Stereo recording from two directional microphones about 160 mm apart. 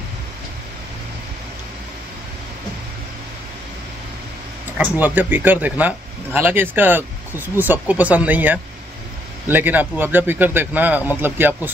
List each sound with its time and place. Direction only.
4.7 s speech: 10° right (ahead or behind)